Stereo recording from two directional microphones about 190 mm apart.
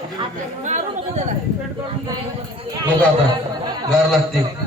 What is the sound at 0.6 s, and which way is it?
Speech, 40° right (ahead or behind).